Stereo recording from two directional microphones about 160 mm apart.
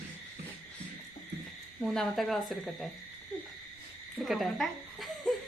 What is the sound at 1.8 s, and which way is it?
Speech, centre (ahead or behind).